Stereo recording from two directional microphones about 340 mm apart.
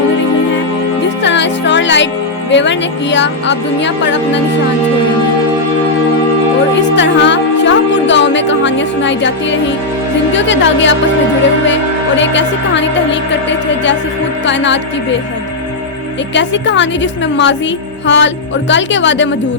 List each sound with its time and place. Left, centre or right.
1.2 s music: left
2.5 s speech: left
6.9 s speech: left
16.3 s speech: left